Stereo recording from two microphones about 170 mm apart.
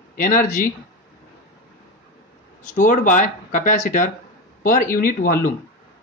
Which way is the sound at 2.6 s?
50° left (ahead or behind).